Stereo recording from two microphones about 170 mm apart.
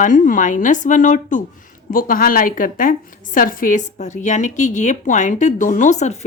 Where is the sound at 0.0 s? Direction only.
50° left (ahead or behind).